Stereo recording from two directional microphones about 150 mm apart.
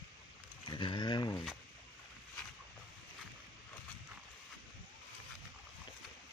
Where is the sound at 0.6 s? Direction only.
30° left (ahead or behind).